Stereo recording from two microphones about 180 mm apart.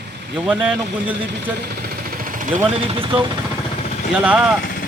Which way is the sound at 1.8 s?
50° right (ahead or behind).